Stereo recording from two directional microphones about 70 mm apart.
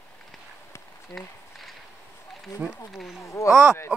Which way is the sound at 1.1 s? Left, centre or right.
Left.